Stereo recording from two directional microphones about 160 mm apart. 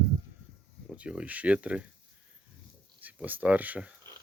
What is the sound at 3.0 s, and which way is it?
Speech, 10° right (ahead or behind).